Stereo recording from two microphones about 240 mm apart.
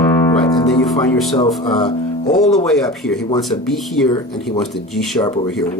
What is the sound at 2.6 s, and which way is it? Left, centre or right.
A man's voice, centre.